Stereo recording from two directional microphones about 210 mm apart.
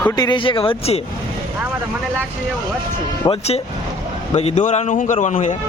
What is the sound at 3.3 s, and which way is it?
Speech, 30° left (ahead or behind).